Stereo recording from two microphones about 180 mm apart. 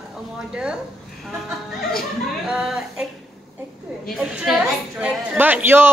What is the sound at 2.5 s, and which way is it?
Speech, 5° right (ahead or behind).